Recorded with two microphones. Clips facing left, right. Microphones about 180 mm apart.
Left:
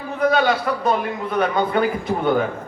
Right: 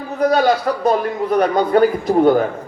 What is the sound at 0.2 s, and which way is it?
A man's voice, 40° right (ahead or behind).